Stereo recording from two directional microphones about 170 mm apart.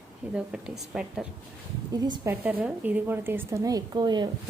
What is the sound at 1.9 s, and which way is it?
Speech, 25° right (ahead or behind).